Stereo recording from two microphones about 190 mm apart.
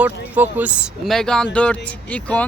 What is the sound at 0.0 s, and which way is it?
Speech, 10° right (ahead or behind).